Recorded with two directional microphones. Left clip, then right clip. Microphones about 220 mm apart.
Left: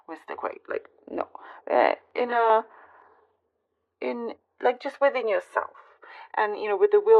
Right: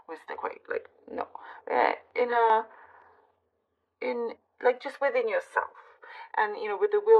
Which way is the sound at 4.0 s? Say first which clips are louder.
Even; 45° left (ahead or behind).